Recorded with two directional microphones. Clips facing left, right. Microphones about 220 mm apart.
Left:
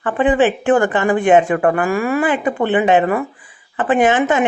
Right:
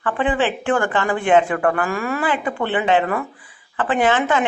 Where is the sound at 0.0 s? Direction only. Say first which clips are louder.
Left 6 dB; 15° left (ahead or behind).